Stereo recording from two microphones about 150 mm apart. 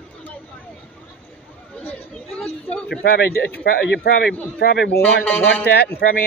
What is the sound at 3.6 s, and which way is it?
A man's voice, 85° left.